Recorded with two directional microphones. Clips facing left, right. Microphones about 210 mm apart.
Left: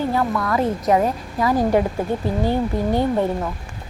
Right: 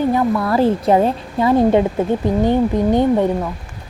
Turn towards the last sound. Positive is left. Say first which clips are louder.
# right 5 dB
turn(degrees=-20)  # may be behind; listen again after turning